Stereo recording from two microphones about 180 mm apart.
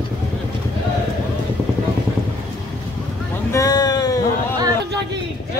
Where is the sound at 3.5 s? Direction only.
20° left (ahead or behind).